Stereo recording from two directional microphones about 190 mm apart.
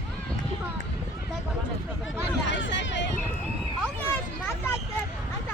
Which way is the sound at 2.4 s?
75° left (ahead or behind).